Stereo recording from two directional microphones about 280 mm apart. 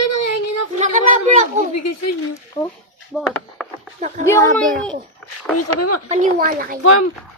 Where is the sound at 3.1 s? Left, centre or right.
Centre.